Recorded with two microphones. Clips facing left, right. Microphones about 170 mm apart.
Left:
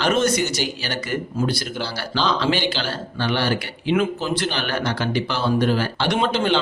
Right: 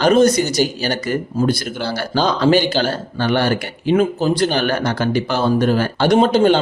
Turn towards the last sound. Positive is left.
turn(degrees=-40)  # may be behind; listen again after turning